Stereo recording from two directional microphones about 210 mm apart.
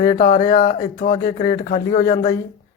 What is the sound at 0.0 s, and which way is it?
Speech, 40° left (ahead or behind).